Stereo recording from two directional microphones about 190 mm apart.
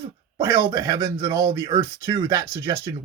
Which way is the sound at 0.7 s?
20° right (ahead or behind).